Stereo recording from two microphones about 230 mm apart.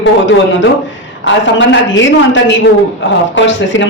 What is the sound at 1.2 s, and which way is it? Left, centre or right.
A woman's voice, left.